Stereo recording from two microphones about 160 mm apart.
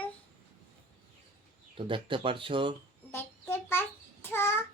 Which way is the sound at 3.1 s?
15° left (ahead or behind).